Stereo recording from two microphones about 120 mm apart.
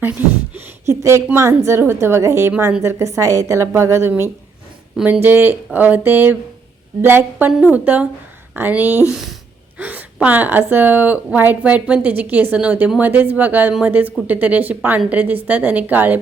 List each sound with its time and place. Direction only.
0.0 s a woman's voice: 15° right (ahead or behind)
4.9 s speech: 5° right (ahead or behind)
5.2 s a woman's voice: 20° right (ahead or behind)
9.0 s a woman's voice: 5° right (ahead or behind)